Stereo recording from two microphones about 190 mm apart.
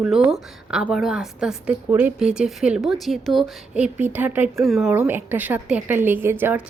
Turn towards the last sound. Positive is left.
turn(degrees=-10)  # may be behind; listen again after turning